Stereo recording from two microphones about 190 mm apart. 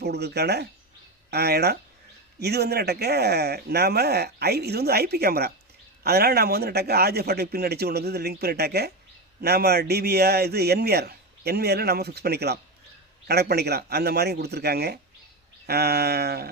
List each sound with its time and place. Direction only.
0.0 s speech: 60° right (ahead or behind)